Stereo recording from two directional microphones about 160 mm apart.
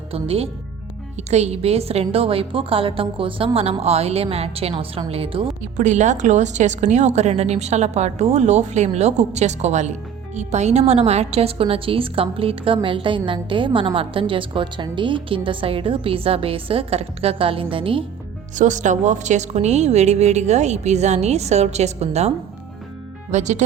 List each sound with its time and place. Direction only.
0.1 s a woman's voice: 35° right (ahead or behind)
5.7 s a woman's voice: 50° right (ahead or behind); by 18.0 s 35° right (ahead or behind)
18.5 s a woman's voice: 50° right (ahead or behind)
23.3 s a woman's voice: 50° right (ahead or behind)